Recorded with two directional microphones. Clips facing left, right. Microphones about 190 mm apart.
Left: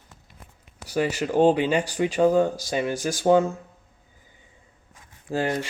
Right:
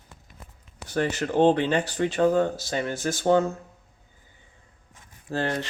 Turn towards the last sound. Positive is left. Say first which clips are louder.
# left 2 dB
turn(degrees=10)  # may be behind; listen again after turning